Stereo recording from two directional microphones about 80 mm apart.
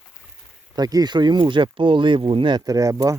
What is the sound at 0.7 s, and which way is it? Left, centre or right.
Speech, right.